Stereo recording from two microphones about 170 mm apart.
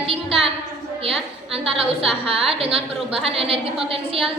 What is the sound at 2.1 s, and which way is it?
A woman's voice, 35° right (ahead or behind).